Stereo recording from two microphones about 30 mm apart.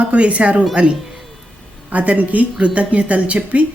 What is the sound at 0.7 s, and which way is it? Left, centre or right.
Speech, right.